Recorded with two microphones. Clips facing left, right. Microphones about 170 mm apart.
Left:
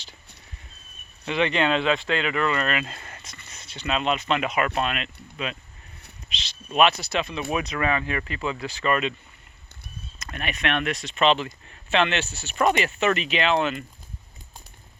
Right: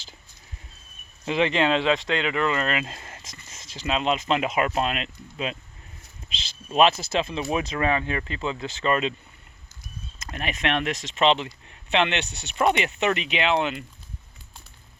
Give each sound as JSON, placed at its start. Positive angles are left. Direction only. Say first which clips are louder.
{"t": 1.3, "sound": "speech", "louder": "right 1 dB", "side_deg": -25}
{"t": 3.6, "sound": "a sound", "louder": "even", "side_deg": -90}
{"t": 3.8, "sound": "speech", "louder": "right 1 dB", "side_deg": -25}
{"t": 6.7, "sound": "speech", "louder": "right 1 dB", "side_deg": -30}
{"t": 10.3, "sound": "speech", "louder": "right 1 dB", "side_deg": -25}